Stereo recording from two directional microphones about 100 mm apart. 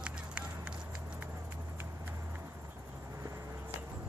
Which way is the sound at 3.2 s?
30° right (ahead or behind).